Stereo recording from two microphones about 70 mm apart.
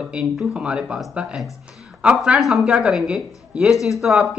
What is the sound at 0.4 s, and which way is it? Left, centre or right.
A woman's voice, centre.